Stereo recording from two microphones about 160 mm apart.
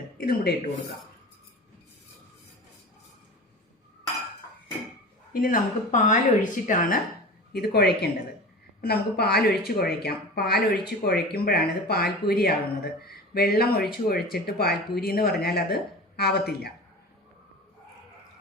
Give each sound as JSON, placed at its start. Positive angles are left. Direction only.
{"t": 0.2, "sound": "speech", "side_deg": 70}
{"t": 5.3, "sound": "speech", "side_deg": 60}
{"t": 7.5, "sound": "speech", "side_deg": 80}